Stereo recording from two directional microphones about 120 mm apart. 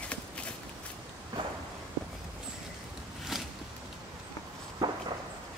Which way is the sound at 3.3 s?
5° right (ahead or behind).